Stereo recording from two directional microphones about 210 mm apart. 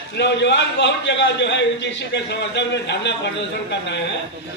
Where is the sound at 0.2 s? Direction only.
55° left (ahead or behind).